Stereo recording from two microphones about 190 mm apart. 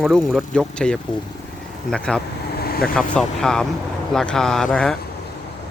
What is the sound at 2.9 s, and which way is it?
Speech, 5° left (ahead or behind).